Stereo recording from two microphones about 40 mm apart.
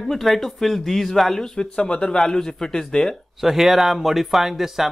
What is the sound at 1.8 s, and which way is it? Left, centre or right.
Speech, left.